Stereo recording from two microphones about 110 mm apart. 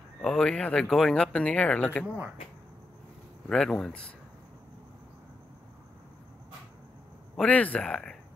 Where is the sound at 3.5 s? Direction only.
5° left (ahead or behind).